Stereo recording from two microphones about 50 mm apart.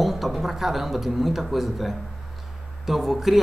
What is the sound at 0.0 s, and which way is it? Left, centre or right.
A man's voice, centre.